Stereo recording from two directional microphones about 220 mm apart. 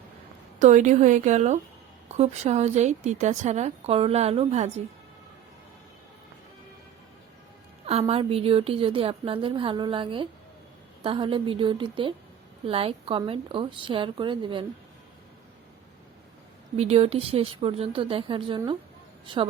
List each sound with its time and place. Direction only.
0.6 s a woman's voice: 35° right (ahead or behind)
7.9 s a woman's voice: 30° right (ahead or behind)
16.7 s a woman's voice: 30° right (ahead or behind)